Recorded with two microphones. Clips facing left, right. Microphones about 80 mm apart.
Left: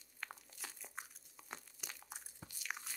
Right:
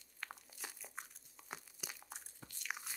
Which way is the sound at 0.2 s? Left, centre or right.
Centre.